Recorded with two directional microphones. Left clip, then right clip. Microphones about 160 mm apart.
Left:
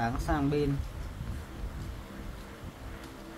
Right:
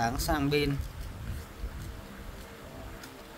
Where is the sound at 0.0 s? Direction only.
80° right.